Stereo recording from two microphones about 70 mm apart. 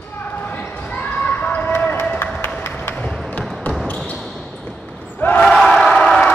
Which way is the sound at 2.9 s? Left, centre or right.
Centre.